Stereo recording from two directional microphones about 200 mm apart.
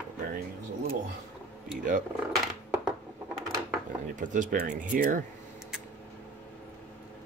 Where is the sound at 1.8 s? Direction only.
40° right (ahead or behind).